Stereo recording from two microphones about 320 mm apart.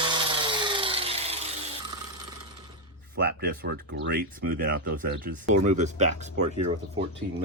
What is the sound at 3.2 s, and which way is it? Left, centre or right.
Speech, right.